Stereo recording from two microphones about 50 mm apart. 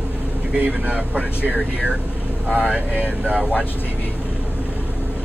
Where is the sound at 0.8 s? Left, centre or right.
Right.